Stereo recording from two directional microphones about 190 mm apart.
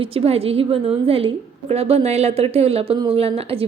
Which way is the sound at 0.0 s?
30° right (ahead or behind).